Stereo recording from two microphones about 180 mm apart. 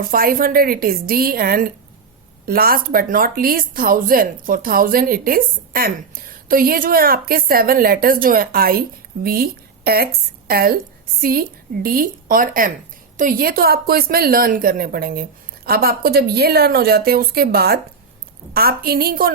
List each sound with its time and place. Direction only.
0.0 s a woman's voice: 55° right (ahead or behind)